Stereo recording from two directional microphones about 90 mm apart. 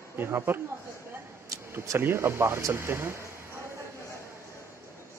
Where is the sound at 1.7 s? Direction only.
25° right (ahead or behind).